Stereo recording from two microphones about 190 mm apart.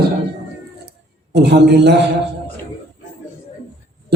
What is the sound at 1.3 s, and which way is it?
Speech, 60° right (ahead or behind).